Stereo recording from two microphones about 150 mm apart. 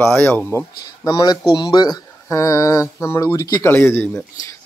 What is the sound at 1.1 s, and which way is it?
Speech, 25° left (ahead or behind).